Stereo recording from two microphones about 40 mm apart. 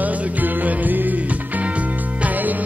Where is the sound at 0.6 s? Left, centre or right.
Right.